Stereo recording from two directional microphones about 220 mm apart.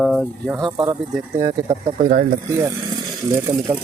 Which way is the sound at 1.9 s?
40° right (ahead or behind).